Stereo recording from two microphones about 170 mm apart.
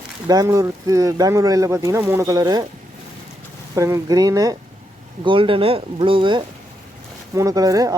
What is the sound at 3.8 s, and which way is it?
Speech, 20° right (ahead or behind).